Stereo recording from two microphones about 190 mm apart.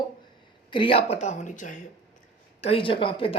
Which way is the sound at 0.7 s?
30° left (ahead or behind).